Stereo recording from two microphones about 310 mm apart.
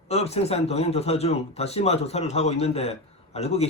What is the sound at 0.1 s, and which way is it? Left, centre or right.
Speech, centre.